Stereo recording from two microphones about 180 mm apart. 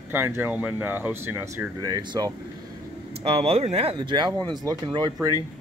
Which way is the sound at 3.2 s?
35° right (ahead or behind).